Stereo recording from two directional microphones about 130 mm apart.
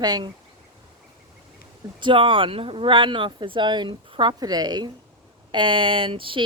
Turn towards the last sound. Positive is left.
turn(degrees=-40)  # may be behind; listen again after turning